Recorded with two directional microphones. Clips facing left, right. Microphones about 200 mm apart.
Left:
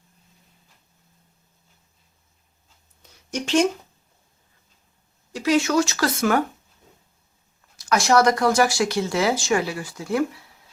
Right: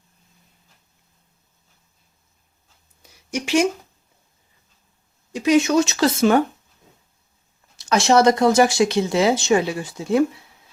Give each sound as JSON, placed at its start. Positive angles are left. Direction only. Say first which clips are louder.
{"t": 3.0, "sound": "a sound", "louder": "right 2 dB", "side_deg": -10}
{"t": 5.3, "sound": "speech", "louder": "right 3 dB", "side_deg": -20}
{"t": 7.8, "sound": "speech", "louder": "right 2 dB", "side_deg": -25}